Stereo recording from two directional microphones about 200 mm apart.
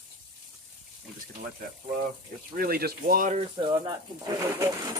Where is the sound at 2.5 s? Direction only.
50° right (ahead or behind).